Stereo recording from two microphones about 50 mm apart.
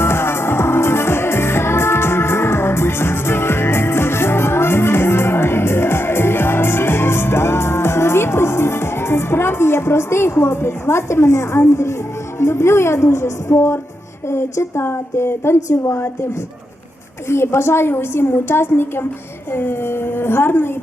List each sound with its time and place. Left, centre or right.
0.0 s music: left
11.7 s a woman's voice: left
12.4 s a woman's voice: left
17.2 s a woman's voice: left